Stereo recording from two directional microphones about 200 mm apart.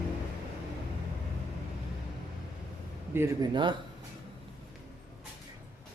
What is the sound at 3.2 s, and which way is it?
Speech, 15° right (ahead or behind).